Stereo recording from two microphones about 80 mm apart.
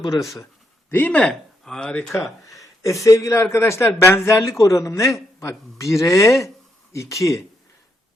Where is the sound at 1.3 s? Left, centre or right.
Centre.